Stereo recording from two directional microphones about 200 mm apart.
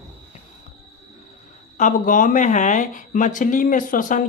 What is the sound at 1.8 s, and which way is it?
Speech, 40° left (ahead or behind).